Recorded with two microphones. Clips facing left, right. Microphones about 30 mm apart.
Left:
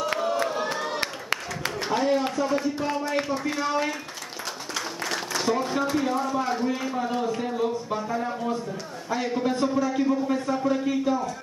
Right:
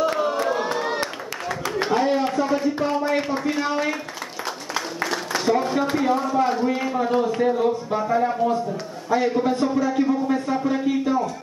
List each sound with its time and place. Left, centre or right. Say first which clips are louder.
0.2 s a sound: right 3 dB; centre
5.4 s a man's voice: right 4 dB; centre
9.1 s a man's voice: right 6 dB; centre